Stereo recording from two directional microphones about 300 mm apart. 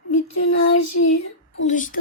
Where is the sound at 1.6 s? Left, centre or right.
Left.